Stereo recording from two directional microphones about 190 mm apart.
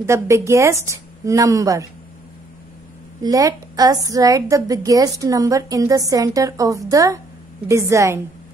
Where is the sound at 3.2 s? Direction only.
20° right (ahead or behind).